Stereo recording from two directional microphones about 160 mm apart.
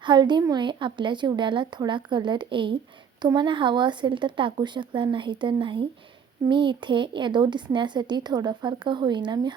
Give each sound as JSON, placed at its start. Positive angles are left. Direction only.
{"t": 0.0, "sound": "speech", "side_deg": -30}